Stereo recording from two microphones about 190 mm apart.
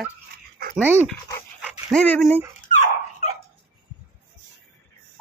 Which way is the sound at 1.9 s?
5° left (ahead or behind).